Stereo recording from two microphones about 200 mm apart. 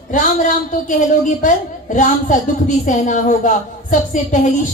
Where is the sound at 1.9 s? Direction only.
40° left (ahead or behind).